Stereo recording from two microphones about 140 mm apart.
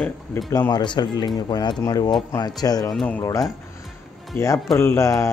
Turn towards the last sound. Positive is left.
turn(degrees=20)  # may be behind; listen again after turning